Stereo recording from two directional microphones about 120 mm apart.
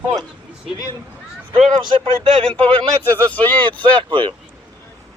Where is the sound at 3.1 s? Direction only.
15° left (ahead or behind).